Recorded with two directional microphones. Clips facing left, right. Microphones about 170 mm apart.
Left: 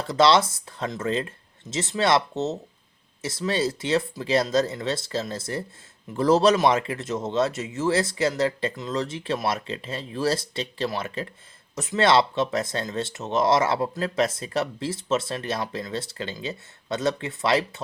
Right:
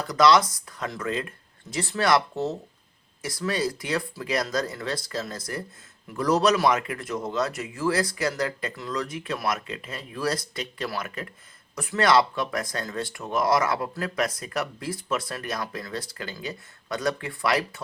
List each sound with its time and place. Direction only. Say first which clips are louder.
0.0 s speech: even; 30° left (ahead or behind)